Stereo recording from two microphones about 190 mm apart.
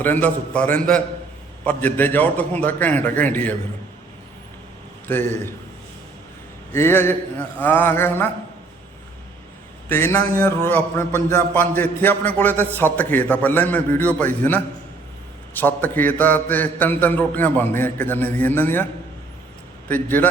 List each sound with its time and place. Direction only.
0.0 s a man's voice: 10° left (ahead or behind)
5.0 s a man's voice: 10° left (ahead or behind)
6.7 s a man's voice: 10° left (ahead or behind)
9.9 s a man's voice: 10° left (ahead or behind)
19.9 s a man's voice: 10° left (ahead or behind)